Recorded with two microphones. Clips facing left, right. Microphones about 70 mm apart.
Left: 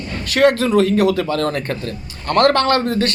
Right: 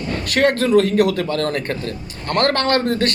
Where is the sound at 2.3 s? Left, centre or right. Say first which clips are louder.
Left 3 dB; right.